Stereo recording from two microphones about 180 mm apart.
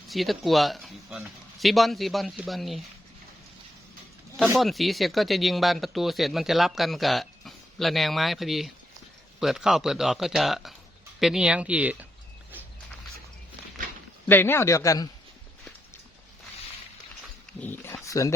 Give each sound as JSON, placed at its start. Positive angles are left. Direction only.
{"t": 0.1, "sound": "speech", "side_deg": 0}
{"t": 4.5, "sound": "speech", "side_deg": 0}
{"t": 14.3, "sound": "a man's voice", "side_deg": 10}
{"t": 17.6, "sound": "speech", "side_deg": 10}